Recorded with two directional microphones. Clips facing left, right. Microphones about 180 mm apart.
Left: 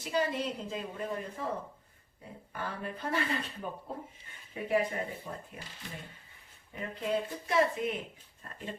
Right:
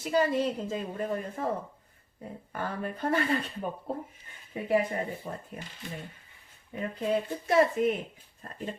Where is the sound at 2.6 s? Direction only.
50° right (ahead or behind).